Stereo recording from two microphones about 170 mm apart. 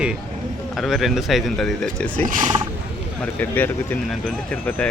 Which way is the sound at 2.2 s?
50° right (ahead or behind).